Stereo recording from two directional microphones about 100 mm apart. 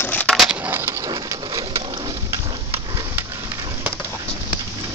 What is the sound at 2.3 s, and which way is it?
Horse, 35° right (ahead or behind).